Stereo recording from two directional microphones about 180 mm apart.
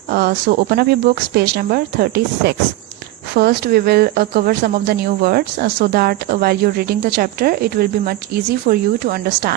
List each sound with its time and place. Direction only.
0.1 s speech: 60° right (ahead or behind)